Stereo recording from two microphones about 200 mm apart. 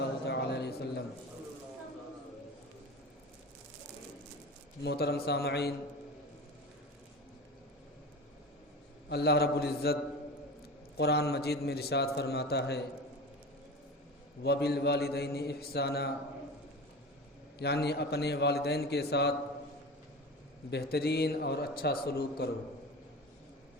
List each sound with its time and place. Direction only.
0.3 s a sound: 55° left (ahead or behind)
4.8 s a man's voice: 55° left (ahead or behind)
9.0 s a man's voice: 55° left (ahead or behind)
14.4 s a man's voice: 55° left (ahead or behind)
17.6 s a man's voice: 55° left (ahead or behind)
20.7 s a man's voice: 55° left (ahead or behind)